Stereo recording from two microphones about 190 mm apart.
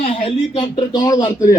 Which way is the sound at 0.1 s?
30° left (ahead or behind).